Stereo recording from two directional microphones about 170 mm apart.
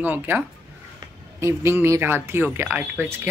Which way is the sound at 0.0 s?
10° right (ahead or behind).